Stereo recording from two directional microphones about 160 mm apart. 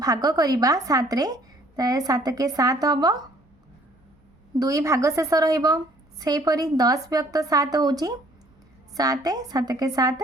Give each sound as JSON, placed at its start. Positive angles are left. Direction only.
{"t": 0.0, "sound": "a woman's voice", "side_deg": -20}
{"t": 4.5, "sound": "a woman's voice", "side_deg": -20}